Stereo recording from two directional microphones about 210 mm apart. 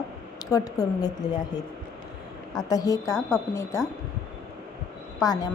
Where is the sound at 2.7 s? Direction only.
15° left (ahead or behind).